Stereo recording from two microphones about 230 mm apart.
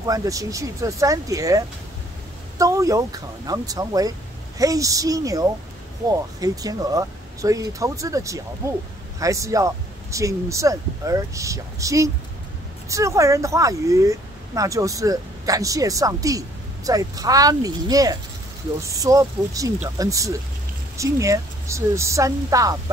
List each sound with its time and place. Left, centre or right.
0.0 s speech: centre
2.6 s speech: centre